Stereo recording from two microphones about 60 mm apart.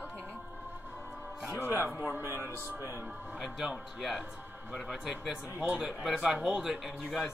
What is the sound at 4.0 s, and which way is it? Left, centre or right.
A man's voice, centre.